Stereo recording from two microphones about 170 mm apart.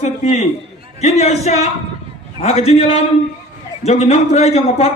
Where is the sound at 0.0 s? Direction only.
40° left (ahead or behind).